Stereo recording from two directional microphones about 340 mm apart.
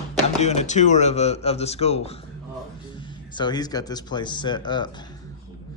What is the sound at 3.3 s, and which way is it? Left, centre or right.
Speech, centre.